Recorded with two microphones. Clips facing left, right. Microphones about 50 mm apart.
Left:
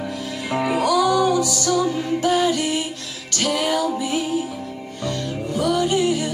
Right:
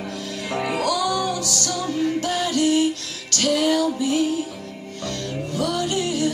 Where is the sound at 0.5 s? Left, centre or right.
Centre.